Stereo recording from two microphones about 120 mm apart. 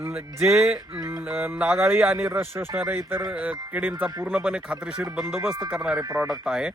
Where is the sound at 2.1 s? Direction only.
20° right (ahead or behind).